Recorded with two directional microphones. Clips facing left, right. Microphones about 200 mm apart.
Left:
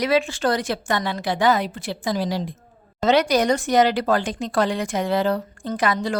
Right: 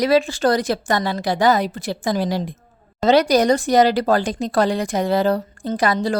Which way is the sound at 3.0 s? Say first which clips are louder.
Right 3 dB; 35° right (ahead or behind).